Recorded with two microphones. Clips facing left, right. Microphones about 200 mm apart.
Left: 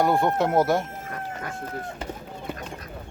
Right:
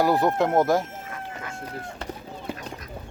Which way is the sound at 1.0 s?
40° left (ahead or behind).